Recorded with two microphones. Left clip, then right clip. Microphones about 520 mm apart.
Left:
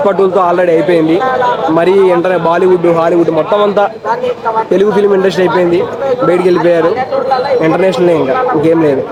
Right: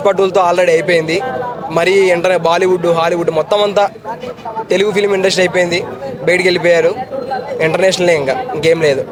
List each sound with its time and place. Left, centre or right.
0.3 s a man's voice: right
4.7 s a man's voice: right